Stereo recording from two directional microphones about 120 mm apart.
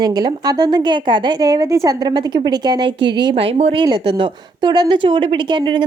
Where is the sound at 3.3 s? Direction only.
55° right (ahead or behind).